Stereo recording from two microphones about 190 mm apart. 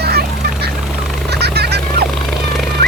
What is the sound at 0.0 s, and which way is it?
Vehicle, 55° right (ahead or behind).